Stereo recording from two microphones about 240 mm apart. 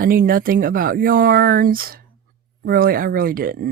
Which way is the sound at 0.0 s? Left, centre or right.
Right.